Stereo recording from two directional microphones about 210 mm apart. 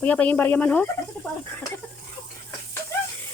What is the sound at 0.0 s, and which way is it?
Speech, 5° left (ahead or behind).